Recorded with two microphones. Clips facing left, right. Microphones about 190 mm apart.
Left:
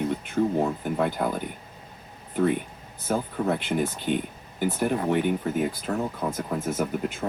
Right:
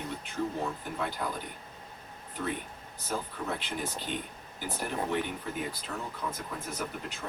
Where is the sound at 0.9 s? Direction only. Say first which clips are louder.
Left 10 dB; 55° left (ahead or behind).